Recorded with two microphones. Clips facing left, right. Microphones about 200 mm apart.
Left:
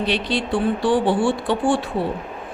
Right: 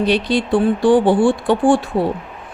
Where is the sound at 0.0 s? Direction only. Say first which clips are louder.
Right 6 dB; 45° right (ahead or behind).